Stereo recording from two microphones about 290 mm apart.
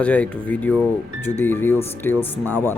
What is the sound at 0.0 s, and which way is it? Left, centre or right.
Speech, centre.